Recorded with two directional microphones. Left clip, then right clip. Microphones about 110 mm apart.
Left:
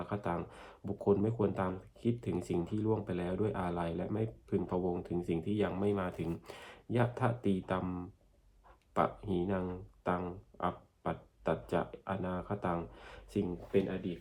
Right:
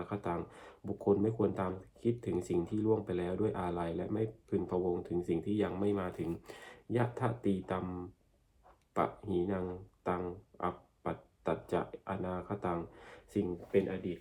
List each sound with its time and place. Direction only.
0.1 s speech: 10° left (ahead or behind)
8.9 s speech: 15° left (ahead or behind)